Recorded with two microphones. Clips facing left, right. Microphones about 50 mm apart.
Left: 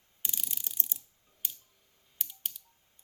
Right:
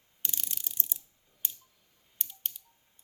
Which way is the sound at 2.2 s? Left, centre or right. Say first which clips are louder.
Even; centre.